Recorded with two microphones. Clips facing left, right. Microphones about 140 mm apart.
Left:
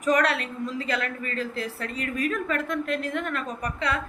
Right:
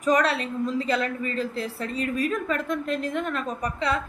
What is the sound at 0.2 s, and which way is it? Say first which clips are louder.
A woman's voice: right 1 dB; 30° right (ahead or behind).